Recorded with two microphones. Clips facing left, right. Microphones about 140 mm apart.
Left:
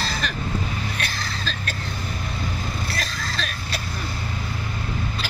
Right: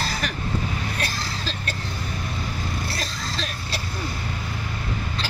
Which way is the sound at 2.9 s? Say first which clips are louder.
Left 1 dB; 25° right (ahead or behind).